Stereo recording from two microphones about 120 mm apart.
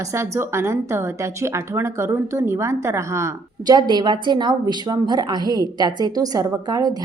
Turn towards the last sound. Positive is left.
turn(degrees=-30)  # may be behind; listen again after turning